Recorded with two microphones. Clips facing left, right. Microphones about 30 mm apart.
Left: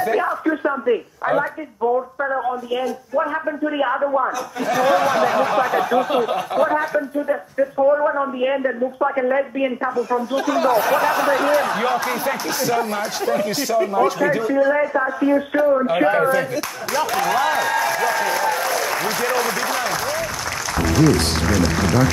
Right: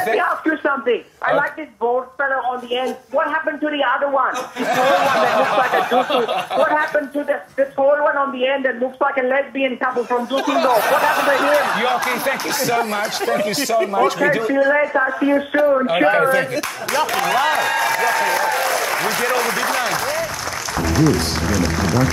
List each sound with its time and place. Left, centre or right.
0.0 s speech: right
1.8 s speech: right
4.8 s speech: right
10.7 s speech: right
11.7 s speech: right
14.0 s speech: right
16.0 s speech: right
17.1 s speech: right